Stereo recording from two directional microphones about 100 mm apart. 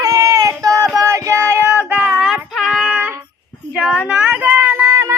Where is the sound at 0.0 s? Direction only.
35° right (ahead or behind).